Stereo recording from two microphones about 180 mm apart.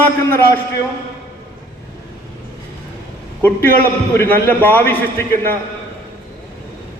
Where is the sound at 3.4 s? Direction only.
10° left (ahead or behind).